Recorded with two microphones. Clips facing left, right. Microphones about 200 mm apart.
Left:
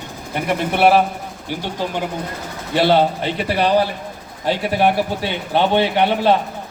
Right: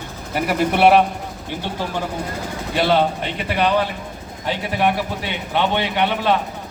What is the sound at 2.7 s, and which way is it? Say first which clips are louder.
Speech: left 3 dB; 30° left (ahead or behind).